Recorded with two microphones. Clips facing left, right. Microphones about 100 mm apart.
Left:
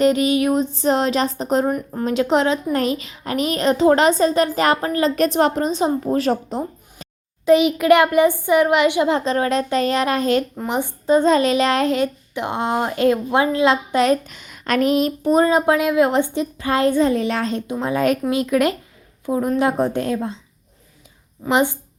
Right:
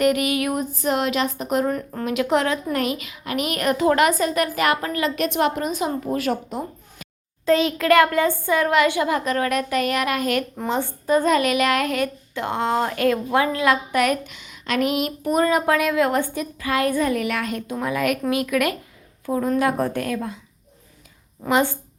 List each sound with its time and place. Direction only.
0.0 s speech: 25° left (ahead or behind)
1.7 s speech: 15° left (ahead or behind)
2.0 s a woman's voice: 30° left (ahead or behind)
7.4 s speech: 15° left (ahead or behind)
10.7 s speech: 15° left (ahead or behind)
14.3 s speech: 45° left (ahead or behind); by 20.4 s 25° left (ahead or behind)
21.5 s speech: 15° left (ahead or behind)